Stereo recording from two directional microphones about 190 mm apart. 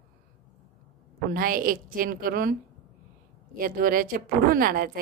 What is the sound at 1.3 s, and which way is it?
A woman's voice, 50° right (ahead or behind).